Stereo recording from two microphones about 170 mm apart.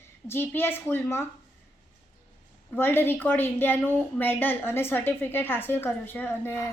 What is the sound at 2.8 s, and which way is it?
A woman's voice, 10° left (ahead or behind).